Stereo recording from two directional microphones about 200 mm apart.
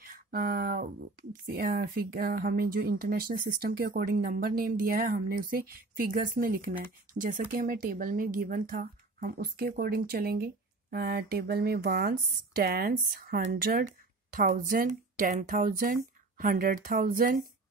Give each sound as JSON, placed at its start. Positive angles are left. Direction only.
{"t": 0.0, "sound": "speech", "side_deg": -45}